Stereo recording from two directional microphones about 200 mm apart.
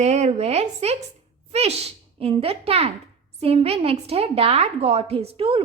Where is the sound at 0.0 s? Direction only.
35° right (ahead or behind).